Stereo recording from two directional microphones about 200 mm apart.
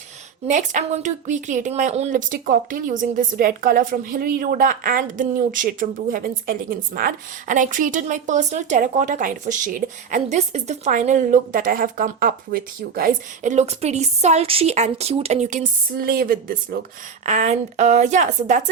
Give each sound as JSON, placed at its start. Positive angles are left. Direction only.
{"t": 0.4, "sound": "a woman's voice", "side_deg": -40}
{"t": 17.2, "sound": "a woman's voice", "side_deg": -35}